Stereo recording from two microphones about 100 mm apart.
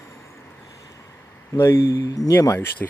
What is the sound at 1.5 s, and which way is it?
Speech, 25° left (ahead or behind).